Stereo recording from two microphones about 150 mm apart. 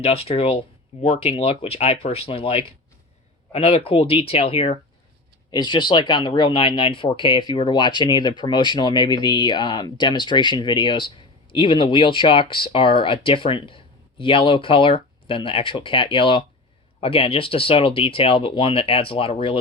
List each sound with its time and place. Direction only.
0.0 s speech: 40° left (ahead or behind)